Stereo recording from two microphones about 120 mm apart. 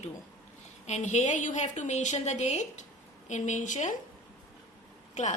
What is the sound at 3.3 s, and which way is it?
Speech, 90° left.